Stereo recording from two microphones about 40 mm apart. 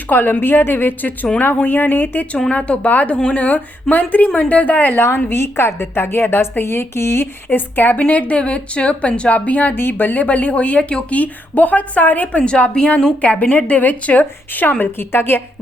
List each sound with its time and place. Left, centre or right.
0.1 s a woman's voice: left
2.5 s a woman's voice: left
4.9 s a woman's voice: left
7.9 s a woman's voice: left
9.3 s a woman's voice: left
9.7 s a woman's voice: left
10.2 s a woman's voice: left
12.5 s a woman's voice: left
14.9 s speech: left